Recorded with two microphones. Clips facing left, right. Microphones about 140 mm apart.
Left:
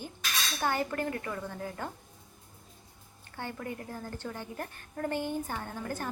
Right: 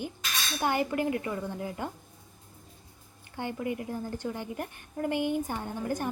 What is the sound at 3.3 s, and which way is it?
A woman's voice, 15° right (ahead or behind).